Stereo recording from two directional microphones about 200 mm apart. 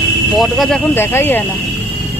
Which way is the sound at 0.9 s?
10° left (ahead or behind).